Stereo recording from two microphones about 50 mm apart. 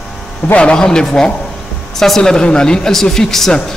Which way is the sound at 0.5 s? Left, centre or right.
Left.